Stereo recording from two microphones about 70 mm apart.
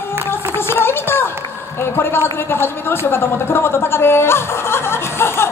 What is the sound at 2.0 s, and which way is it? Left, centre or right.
Speech, left.